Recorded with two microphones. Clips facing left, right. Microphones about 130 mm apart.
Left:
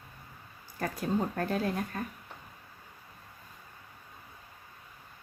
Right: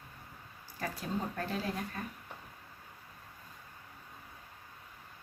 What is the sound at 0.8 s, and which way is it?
Speech, 50° left (ahead or behind).